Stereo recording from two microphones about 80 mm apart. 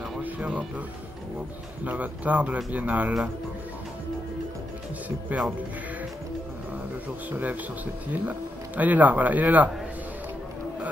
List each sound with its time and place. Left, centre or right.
0.2 s speech: centre
1.9 s speech: centre
7.2 s speech: right